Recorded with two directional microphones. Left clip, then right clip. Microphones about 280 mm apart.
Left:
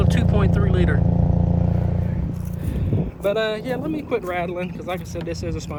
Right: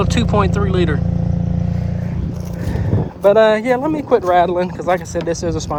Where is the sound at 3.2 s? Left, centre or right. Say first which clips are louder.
Right 11 dB; centre.